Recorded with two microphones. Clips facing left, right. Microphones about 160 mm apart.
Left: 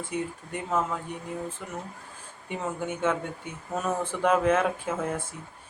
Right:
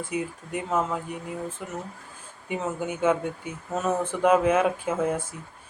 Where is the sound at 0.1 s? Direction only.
5° right (ahead or behind).